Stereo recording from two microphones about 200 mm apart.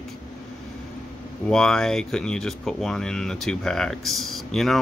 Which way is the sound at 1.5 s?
5° left (ahead or behind).